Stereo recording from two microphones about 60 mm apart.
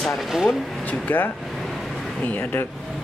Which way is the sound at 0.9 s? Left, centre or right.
Left.